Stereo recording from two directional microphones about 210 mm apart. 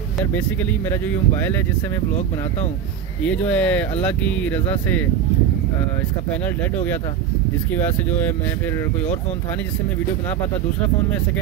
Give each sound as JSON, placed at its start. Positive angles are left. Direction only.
{"t": 0.8, "sound": "speech", "side_deg": 10}
{"t": 3.2, "sound": "speech", "side_deg": 5}
{"t": 7.7, "sound": "speech", "side_deg": 10}